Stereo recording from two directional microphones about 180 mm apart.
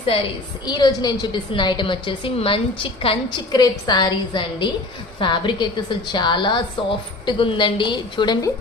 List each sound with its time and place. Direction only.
0.0 s a woman's voice: 30° left (ahead or behind)